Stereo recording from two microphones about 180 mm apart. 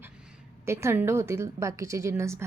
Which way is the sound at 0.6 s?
15° right (ahead or behind).